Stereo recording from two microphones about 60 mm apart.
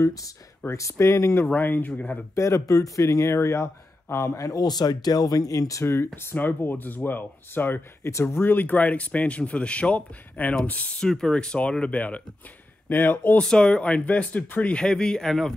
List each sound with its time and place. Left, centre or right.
0.0 s speech: left
0.7 s speech: left
1.5 s speech: left
2.3 s speech: left
6.3 s speech: left
8.0 s speech: left
8.5 s speech: left
11.1 s speech: centre; by 13.4 s left
13.4 s speech: centre